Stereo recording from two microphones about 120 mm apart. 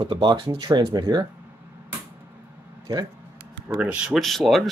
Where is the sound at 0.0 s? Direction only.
45° right (ahead or behind).